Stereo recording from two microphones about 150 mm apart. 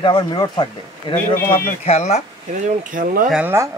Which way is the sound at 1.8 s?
50° left (ahead or behind).